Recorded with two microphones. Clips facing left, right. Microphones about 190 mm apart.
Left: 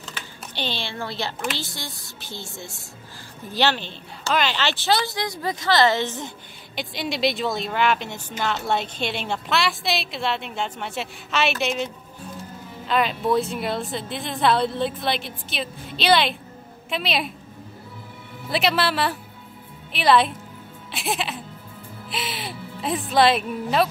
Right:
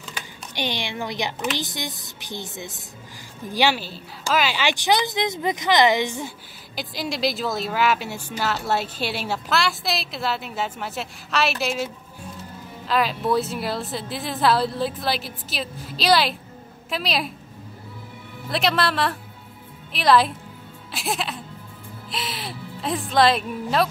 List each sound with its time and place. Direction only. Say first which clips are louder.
0.6 s a woman's voice: right 2 dB; 15° right (ahead or behind)
6.7 s a woman's voice: even; centre (ahead or behind)
18.5 s a woman's voice: even; 5° left (ahead or behind)